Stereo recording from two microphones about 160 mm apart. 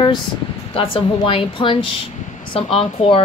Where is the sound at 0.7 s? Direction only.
35° left (ahead or behind).